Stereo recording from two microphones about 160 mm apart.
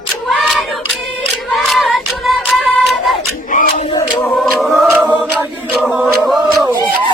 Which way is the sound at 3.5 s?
55° left (ahead or behind).